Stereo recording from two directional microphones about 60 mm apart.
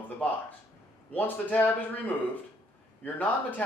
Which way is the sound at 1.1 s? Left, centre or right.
Left.